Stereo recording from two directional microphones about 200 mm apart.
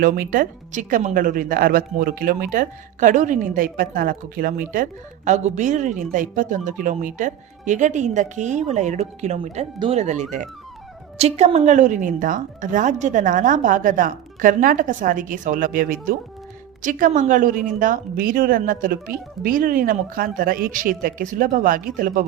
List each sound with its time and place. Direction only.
0.0 s speech: 45° right (ahead or behind)